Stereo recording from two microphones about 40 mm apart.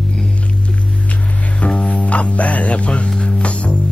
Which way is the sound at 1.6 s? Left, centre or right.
Left.